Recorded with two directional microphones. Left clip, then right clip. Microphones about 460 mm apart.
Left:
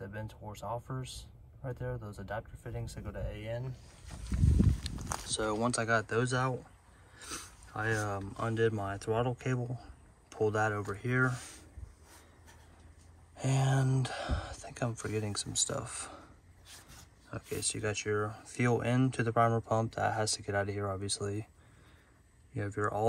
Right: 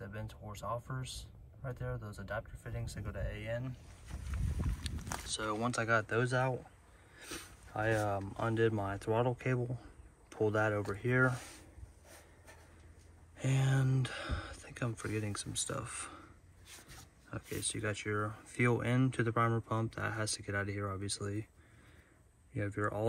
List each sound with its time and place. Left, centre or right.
0.0 s speech: centre
4.9 s a sound: centre
5.3 s speech: centre
13.4 s speech: centre
14.6 s a sound: centre
15.0 s speech: centre
17.3 s speech: centre
22.5 s speech: centre